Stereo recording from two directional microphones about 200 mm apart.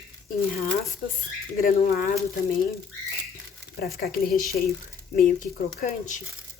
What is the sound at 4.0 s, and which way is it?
A woman's voice, 45° left (ahead or behind).